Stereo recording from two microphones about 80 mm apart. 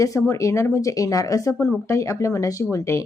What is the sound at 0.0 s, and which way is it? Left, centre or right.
Speech, left.